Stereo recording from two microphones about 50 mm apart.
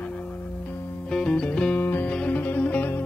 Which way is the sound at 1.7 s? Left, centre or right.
Left.